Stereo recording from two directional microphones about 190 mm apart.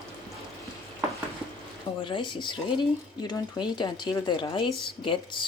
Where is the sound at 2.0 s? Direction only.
25° left (ahead or behind).